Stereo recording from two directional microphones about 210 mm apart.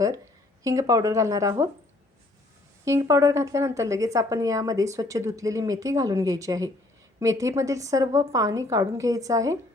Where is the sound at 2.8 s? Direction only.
15° right (ahead or behind).